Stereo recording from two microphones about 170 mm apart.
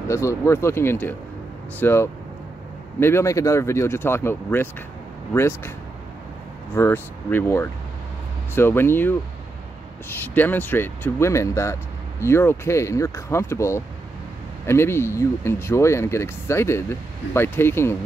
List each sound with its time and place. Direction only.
0.1 s speech: 15° left (ahead or behind)
6.7 s speech: 15° left (ahead or behind)